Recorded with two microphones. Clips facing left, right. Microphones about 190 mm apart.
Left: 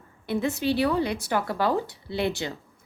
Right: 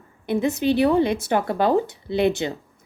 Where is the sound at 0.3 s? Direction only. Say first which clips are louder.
Right 5 dB; 20° right (ahead or behind).